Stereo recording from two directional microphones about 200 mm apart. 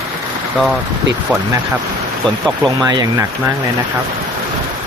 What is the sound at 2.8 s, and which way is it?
Speech, 15° right (ahead or behind).